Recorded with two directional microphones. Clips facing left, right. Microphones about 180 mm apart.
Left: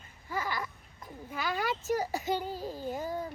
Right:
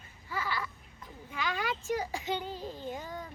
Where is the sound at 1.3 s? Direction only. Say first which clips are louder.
Left 2 dB; 40° left (ahead or behind).